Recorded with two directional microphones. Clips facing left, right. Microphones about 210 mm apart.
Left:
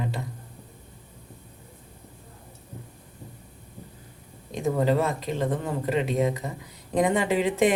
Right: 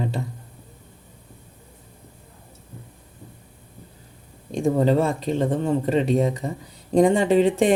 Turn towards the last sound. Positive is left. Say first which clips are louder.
# right 5 dB
turn(degrees=-30)  # may be behind; listen again after turning